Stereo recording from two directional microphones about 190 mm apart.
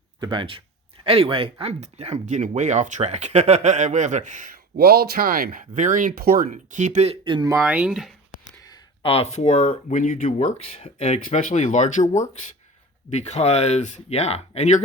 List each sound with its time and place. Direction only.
0.2 s speech: 25° right (ahead or behind)
7.7 s speech: 5° right (ahead or behind)
8.6 s speech: 25° left (ahead or behind)